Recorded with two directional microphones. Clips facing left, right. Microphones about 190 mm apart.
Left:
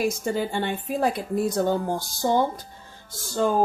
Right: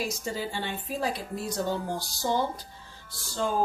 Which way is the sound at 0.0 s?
55° left (ahead or behind).